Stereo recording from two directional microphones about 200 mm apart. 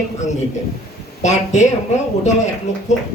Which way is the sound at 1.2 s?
35° left (ahead or behind).